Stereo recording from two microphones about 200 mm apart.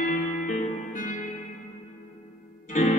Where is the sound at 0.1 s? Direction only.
40° left (ahead or behind).